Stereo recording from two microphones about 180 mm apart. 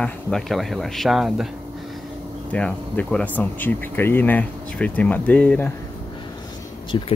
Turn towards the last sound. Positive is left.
turn(degrees=25)  # may be behind; listen again after turning